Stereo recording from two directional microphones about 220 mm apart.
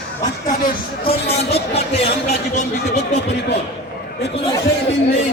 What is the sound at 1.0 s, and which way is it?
Speech, 30° left (ahead or behind).